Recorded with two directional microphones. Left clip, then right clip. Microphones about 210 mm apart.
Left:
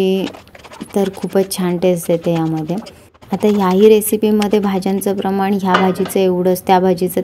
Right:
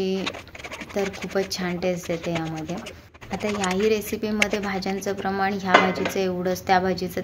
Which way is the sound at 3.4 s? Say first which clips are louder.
Left 12 dB; 50° left (ahead or behind).